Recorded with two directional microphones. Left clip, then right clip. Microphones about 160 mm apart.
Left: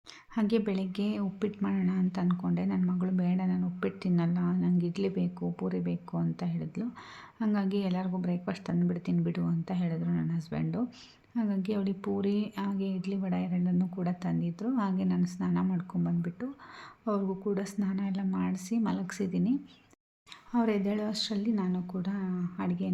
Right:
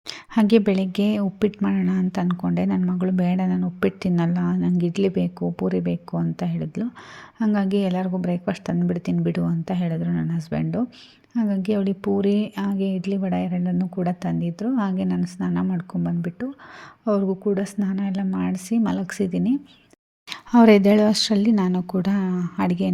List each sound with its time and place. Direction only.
0.1 s speech: 45° right (ahead or behind)
20.3 s speech: 55° right (ahead or behind)